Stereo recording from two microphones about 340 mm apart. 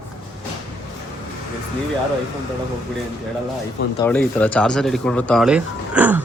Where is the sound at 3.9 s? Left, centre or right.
Centre.